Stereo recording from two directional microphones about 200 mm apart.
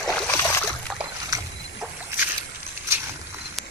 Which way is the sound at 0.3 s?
15° left (ahead or behind).